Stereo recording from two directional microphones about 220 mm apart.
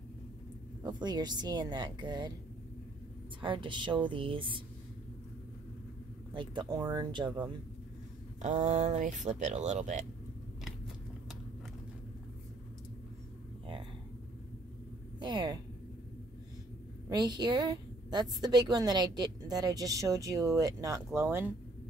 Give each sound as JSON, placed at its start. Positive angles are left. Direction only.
{"t": 0.8, "sound": "speech", "side_deg": -20}
{"t": 3.3, "sound": "speech", "side_deg": -20}
{"t": 6.3, "sound": "speech", "side_deg": -20}
{"t": 8.4, "sound": "speech", "side_deg": -35}
{"t": 15.1, "sound": "speech", "side_deg": -20}
{"t": 17.1, "sound": "a woman's voice", "side_deg": -20}